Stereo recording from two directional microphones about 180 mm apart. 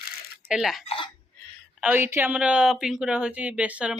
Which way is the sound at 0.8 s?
30° left (ahead or behind).